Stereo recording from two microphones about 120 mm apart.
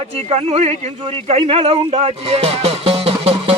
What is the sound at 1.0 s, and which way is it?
Speech, 50° right (ahead or behind).